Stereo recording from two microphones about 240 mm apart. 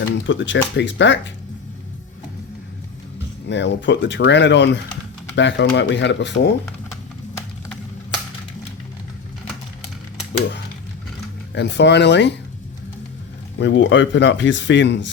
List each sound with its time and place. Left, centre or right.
0.3 s speech: left
3.5 s speech: left
11.5 s speech: left
13.6 s speech: left